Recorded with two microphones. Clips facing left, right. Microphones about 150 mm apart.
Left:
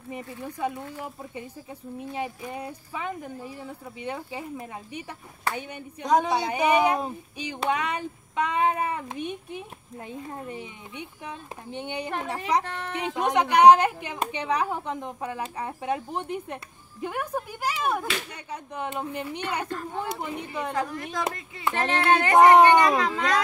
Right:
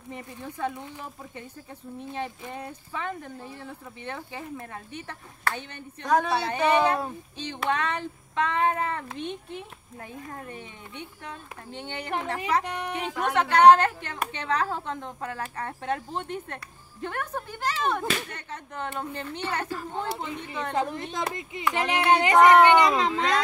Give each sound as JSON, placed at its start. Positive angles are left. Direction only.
{"t": 0.1, "sound": "speech", "side_deg": 10}
{"t": 12.6, "sound": "speech", "side_deg": -15}
{"t": 13.0, "sound": "speech", "side_deg": 15}
{"t": 20.7, "sound": "speech", "side_deg": -25}
{"t": 22.3, "sound": "speech", "side_deg": 20}
{"t": 22.8, "sound": "speech", "side_deg": -25}